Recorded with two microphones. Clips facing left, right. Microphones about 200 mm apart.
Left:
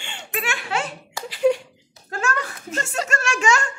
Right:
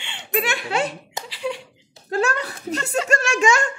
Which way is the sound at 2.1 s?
35° right (ahead or behind).